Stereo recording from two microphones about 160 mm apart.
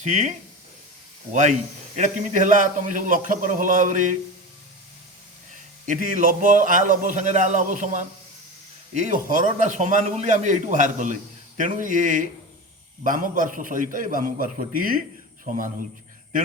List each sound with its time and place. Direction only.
0.0 s a man's voice: 45° right (ahead or behind)
5.8 s a man's voice: 55° right (ahead or behind)